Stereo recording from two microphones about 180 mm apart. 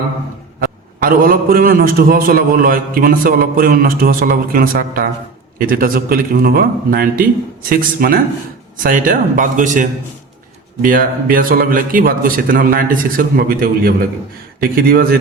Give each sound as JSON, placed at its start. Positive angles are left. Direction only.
{"t": 0.6, "sound": "a man's voice", "side_deg": -55}